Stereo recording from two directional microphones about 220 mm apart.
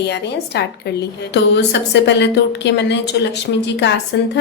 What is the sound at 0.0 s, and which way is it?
A woman's voice, 50° left (ahead or behind).